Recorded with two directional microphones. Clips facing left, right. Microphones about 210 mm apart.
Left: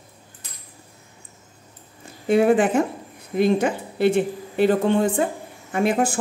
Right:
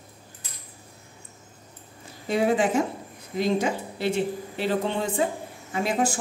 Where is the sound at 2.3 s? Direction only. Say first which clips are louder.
Left 5 dB; 55° left (ahead or behind).